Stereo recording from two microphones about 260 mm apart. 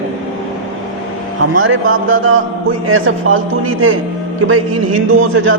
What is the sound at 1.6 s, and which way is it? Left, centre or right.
A man's voice, right.